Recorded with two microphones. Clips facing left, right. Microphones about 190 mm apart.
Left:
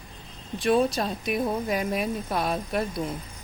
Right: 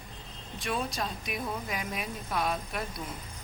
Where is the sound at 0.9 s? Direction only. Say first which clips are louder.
Left 8 dB; 40° left (ahead or behind).